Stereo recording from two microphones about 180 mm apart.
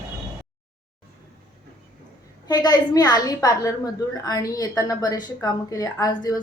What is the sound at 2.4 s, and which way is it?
A woman's voice, 20° left (ahead or behind).